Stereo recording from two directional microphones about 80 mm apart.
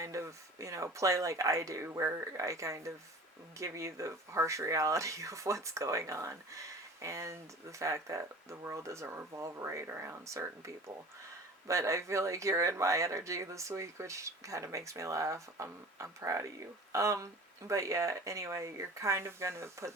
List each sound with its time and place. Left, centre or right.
0.0 s speech: right
11.7 s speech: right